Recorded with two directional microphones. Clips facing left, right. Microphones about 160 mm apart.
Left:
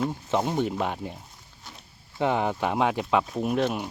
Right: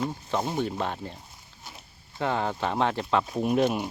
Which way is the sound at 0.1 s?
15° left (ahead or behind).